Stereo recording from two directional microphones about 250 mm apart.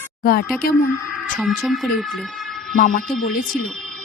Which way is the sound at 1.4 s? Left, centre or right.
Centre.